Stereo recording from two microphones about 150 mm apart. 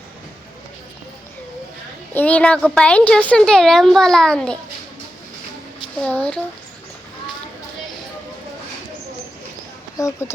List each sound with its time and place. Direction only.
2.1 s a woman's voice: 10° left (ahead or behind)
6.0 s speech: 5° left (ahead or behind)
10.0 s speech: 20° left (ahead or behind)